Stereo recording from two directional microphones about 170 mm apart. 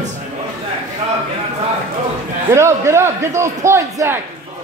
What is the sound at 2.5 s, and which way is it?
A man's voice, 15° right (ahead or behind).